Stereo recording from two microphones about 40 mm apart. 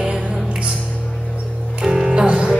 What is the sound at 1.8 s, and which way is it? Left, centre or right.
Music, centre.